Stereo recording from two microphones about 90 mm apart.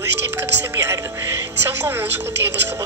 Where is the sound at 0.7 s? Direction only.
25° right (ahead or behind).